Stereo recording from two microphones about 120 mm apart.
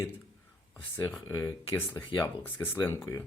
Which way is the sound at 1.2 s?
25° left (ahead or behind).